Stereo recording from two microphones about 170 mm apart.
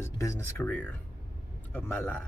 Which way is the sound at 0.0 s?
15° left (ahead or behind).